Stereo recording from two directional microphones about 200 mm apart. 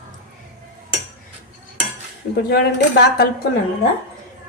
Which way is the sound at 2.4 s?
55° left (ahead or behind).